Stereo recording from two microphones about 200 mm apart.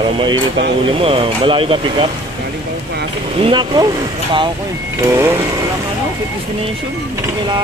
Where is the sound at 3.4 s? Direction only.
20° right (ahead or behind).